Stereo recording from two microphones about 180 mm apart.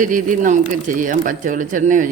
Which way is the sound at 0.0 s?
45° right (ahead or behind).